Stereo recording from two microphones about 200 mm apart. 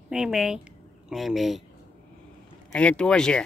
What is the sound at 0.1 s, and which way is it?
Speech, 5° right (ahead or behind).